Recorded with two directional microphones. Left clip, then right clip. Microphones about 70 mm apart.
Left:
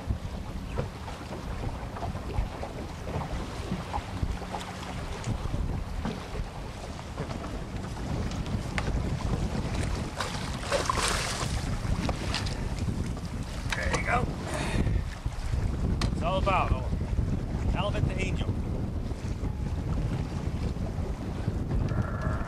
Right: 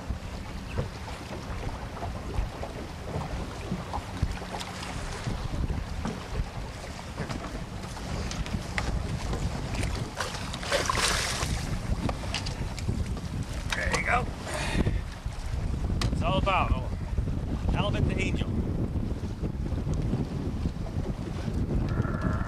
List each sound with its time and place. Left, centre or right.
10.1 s boat: centre
10.7 s boat: centre
13.7 s mechanisms: centre
16.0 s boat: centre
22.0 s livestock: centre